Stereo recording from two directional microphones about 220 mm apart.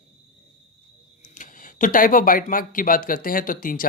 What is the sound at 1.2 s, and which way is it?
Speech, 35° left (ahead or behind).